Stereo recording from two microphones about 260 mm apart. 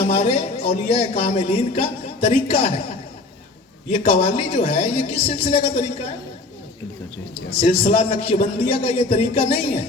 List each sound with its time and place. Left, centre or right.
0.0 s speech: left
3.9 s speech: left
7.6 s speech: left